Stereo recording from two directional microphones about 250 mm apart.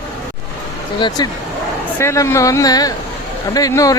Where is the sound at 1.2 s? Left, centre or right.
Centre.